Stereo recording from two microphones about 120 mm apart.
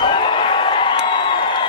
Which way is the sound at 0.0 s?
45° left (ahead or behind).